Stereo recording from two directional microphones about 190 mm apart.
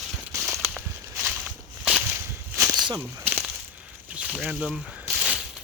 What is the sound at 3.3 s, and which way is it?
Crushing, 10° right (ahead or behind).